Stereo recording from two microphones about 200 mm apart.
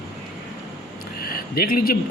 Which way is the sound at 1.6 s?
45° left (ahead or behind).